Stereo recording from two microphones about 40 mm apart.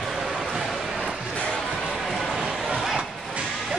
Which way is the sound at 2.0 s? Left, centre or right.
Centre.